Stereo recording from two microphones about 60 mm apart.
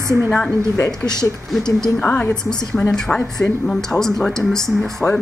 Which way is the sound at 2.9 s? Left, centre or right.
Centre.